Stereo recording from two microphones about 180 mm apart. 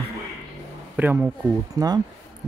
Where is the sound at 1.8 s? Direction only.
20° right (ahead or behind).